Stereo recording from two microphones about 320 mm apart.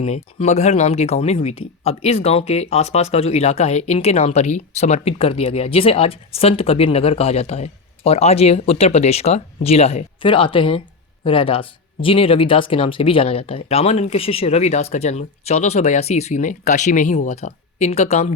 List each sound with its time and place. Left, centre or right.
0.0 s speech: centre